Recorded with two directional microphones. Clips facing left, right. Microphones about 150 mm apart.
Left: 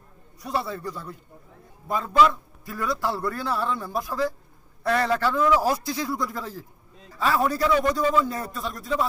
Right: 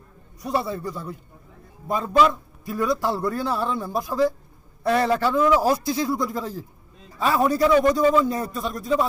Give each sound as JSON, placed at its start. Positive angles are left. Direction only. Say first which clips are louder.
{"t": 0.4, "sound": "a man's voice", "louder": "right 3 dB", "side_deg": -20}